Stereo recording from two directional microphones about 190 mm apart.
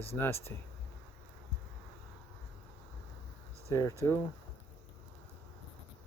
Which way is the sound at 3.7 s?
15° left (ahead or behind).